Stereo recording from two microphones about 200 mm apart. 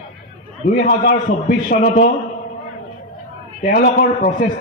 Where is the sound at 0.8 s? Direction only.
45° left (ahead or behind).